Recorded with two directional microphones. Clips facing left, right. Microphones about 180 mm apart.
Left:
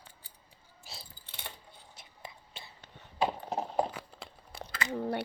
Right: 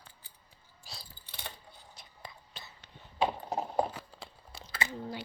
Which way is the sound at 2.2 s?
25° left (ahead or behind).